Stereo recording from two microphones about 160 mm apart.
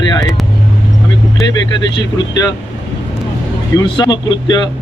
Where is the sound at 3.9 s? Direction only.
25° left (ahead or behind).